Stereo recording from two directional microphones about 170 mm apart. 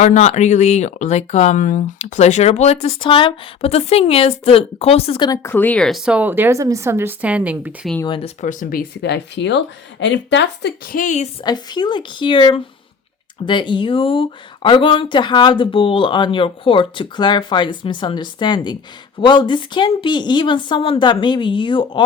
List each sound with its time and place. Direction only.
0.0 s speech: 45° left (ahead or behind)
5.3 s a woman's voice: 15° left (ahead or behind); by 7.9 s 10° right (ahead or behind)
8.0 s speech: 30° left (ahead or behind)
8.4 s speech: 50° left (ahead or behind); by 10.9 s 80° left
10.9 s a woman's voice: 45° left (ahead or behind)
11.4 s speech: 25° left (ahead or behind)